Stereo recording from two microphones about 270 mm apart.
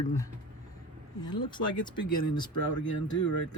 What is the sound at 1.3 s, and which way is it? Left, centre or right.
Speech, centre.